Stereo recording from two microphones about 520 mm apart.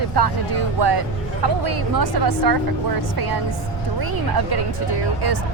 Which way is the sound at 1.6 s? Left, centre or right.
Right.